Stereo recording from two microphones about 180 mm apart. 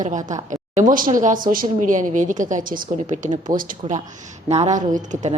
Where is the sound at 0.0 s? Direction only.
45° right (ahead or behind).